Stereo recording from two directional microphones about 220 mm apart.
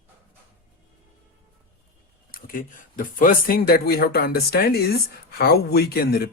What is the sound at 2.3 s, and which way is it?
Speech, 40° left (ahead or behind).